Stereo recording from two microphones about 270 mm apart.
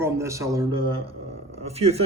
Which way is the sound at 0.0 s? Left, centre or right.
Centre.